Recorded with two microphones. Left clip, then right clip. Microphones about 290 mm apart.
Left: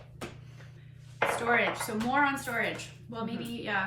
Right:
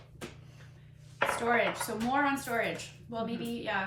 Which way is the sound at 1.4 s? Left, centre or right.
Centre.